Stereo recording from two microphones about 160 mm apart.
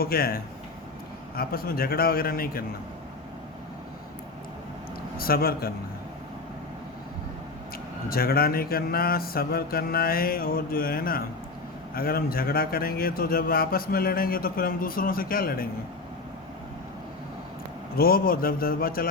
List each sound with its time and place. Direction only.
0.0 s a man's voice: 70° left (ahead or behind)
5.1 s a man's voice: 70° left (ahead or behind)
8.1 s a man's voice: 70° left (ahead or behind)
17.9 s a man's voice: 70° left (ahead or behind)